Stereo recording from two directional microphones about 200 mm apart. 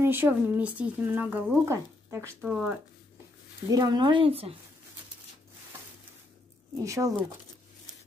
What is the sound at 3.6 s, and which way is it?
Speech, 20° right (ahead or behind).